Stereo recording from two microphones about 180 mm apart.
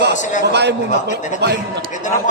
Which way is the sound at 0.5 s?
70° right (ahead or behind).